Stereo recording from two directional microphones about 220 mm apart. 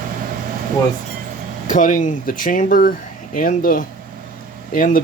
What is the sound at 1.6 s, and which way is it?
Speech, 35° left (ahead or behind).